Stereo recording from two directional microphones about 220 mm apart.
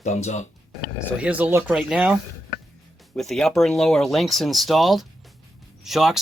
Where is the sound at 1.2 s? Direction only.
5° right (ahead or behind).